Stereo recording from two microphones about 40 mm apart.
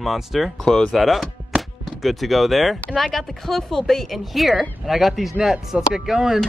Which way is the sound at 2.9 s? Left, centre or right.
Centre.